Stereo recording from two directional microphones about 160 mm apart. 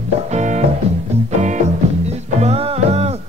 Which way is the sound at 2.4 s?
40° right (ahead or behind).